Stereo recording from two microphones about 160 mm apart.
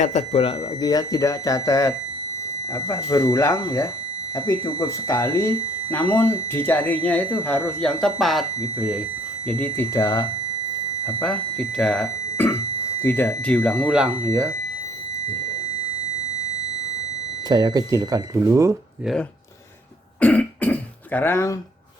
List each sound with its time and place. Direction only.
0.0 s speech: 45° left (ahead or behind)
0.8 s speech: 25° left (ahead or behind); by 9.0 s 5° right (ahead or behind)
9.5 s speech: 10° left (ahead or behind)
11.2 s speech: 5° left (ahead or behind)
13.0 s speech: 15° left (ahead or behind); by 14.2 s 5° right (ahead or behind)
17.5 s speech: 25° right (ahead or behind)
20.1 s throat clearing: 10° left (ahead or behind)